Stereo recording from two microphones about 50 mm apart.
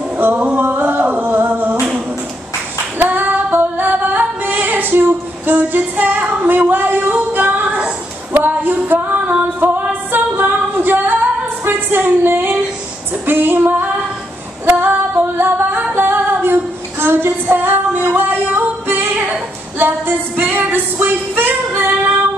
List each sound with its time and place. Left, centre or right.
0.2 s singing: right
3.0 s female singing: right
8.3 s music: right
10.1 s female singing: right
11.6 s a sound: right
13.3 s female singing: right
19.8 s music: right
20.7 s female singing: right